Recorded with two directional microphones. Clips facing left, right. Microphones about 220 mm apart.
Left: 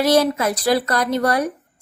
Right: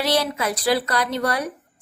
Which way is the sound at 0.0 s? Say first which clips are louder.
Left 6 dB; 45° left (ahead or behind).